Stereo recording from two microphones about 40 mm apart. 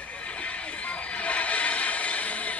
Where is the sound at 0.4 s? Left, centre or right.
Left.